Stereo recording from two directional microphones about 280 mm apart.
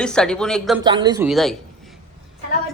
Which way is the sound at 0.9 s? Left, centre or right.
Centre.